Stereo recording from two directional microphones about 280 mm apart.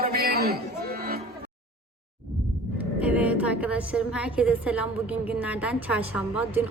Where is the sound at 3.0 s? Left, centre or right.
Centre.